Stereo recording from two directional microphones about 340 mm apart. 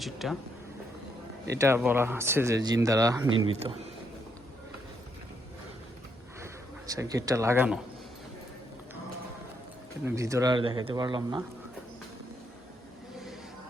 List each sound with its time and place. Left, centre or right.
0.0 s speech: centre
1.5 s speech: centre
3.2 s speech: right
6.4 s a man's voice: centre
10.0 s speech: centre